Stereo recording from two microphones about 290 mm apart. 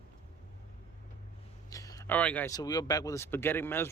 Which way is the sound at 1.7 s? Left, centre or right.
Centre.